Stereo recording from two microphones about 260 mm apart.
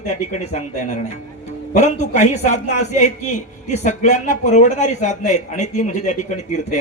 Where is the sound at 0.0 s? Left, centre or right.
Left.